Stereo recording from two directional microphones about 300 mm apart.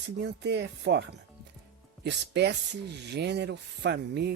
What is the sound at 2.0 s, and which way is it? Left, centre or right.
Speech, right.